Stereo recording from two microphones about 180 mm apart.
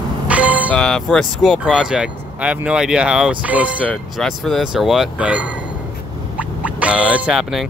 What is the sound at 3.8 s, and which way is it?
Speech, 5° left (ahead or behind).